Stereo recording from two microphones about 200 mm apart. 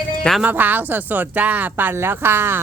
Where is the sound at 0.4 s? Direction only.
10° right (ahead or behind).